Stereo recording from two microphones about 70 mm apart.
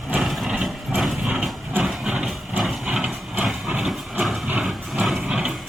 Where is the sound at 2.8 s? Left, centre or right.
Centre.